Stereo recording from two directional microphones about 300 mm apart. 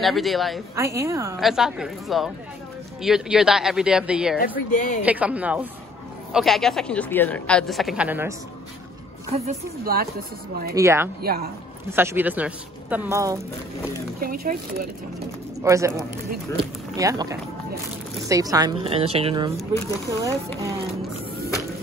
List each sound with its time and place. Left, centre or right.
0.0 s a woman's voice: centre
4.4 s a woman's voice: left
5.0 s a woman's voice: centre
9.3 s speech: right
10.7 s speech: centre
14.2 s speech: right
15.6 s speech: centre